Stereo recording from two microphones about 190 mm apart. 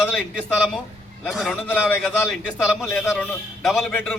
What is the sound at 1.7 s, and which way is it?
A man's voice, 10° left (ahead or behind).